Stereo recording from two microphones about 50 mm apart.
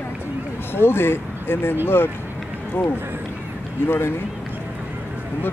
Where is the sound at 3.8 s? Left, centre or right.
Left.